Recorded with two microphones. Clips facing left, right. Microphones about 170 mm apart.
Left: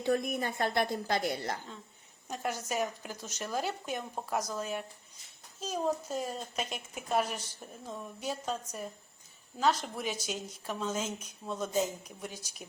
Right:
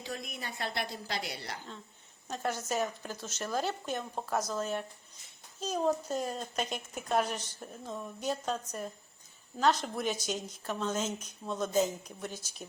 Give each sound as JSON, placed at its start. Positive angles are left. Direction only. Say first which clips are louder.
{"t": 0.0, "sound": "a woman's voice", "louder": "left 10 dB", "side_deg": 55}
{"t": 2.3, "sound": "a woman's voice", "louder": "right 1 dB", "side_deg": 10}